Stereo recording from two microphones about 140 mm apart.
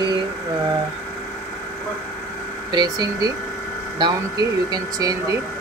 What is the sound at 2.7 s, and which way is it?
Speech, 30° right (ahead or behind).